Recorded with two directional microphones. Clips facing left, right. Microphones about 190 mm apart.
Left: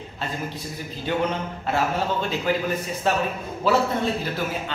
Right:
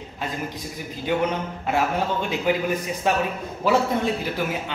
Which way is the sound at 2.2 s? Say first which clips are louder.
Right 1 dB; 15° right (ahead or behind).